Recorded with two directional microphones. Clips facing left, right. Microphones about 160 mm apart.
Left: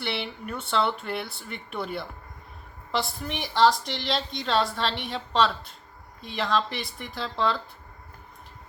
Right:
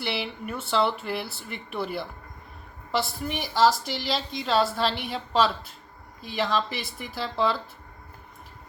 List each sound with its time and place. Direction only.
0.0 s a woman's voice: 5° right (ahead or behind)